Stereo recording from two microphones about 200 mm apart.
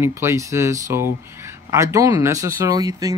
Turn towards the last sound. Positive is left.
turn(degrees=-15)  # may be behind; listen again after turning